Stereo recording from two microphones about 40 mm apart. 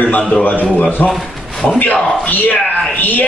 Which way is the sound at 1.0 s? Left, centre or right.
Left.